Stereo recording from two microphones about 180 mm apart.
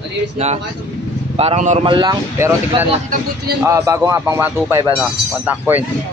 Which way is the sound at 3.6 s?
15° right (ahead or behind).